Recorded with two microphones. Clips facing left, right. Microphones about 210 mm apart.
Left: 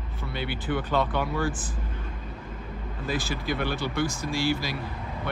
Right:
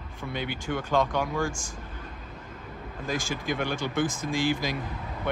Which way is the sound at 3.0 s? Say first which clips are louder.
Left 1 dB; 50° right (ahead or behind).